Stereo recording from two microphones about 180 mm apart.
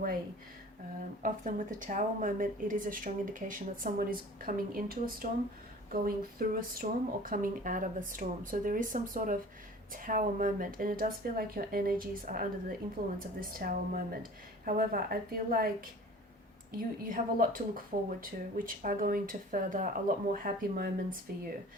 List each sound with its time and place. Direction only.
1.2 s speech: 45° right (ahead or behind)
16.7 s speech: 50° right (ahead or behind)